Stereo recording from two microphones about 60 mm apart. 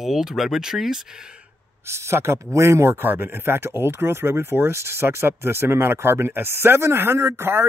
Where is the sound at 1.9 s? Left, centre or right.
Right.